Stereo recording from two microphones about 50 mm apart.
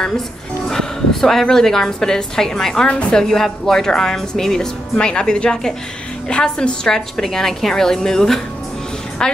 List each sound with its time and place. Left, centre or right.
0.7 s a woman's voice: centre
2.9 s a woman's voice: left
3.2 s speech: centre